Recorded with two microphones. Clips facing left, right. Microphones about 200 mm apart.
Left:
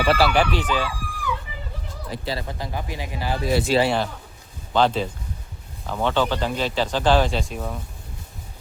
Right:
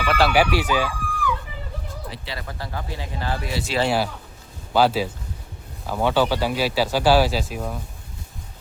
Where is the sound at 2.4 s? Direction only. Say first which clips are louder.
Left 2 dB; 20° left (ahead or behind).